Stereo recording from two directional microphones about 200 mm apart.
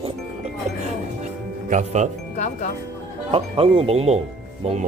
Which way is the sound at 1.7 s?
35° right (ahead or behind).